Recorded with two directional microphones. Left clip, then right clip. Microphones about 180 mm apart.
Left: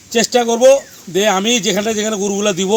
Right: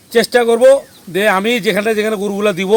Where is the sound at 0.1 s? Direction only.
5° right (ahead or behind).